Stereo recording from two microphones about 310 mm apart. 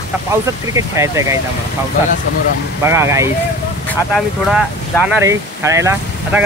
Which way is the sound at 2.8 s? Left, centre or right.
Centre.